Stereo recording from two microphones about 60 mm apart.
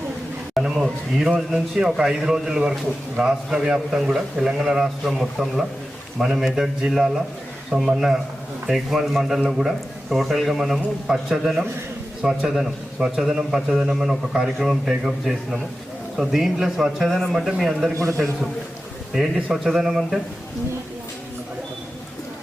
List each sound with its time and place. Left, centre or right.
0.5 s a man's voice: centre
17.9 s a man's voice: right
19.1 s a man's voice: centre